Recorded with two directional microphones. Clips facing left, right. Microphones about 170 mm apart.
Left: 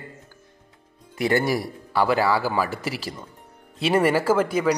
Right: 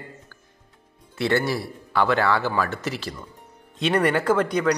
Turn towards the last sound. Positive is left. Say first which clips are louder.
# even
turn(degrees=5)  # may be behind; listen again after turning